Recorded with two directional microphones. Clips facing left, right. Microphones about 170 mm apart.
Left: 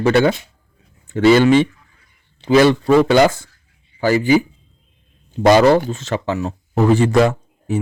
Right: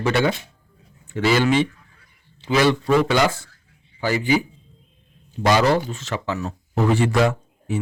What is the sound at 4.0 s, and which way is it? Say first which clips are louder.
Speech: left 6 dB; 45° left (ahead or behind).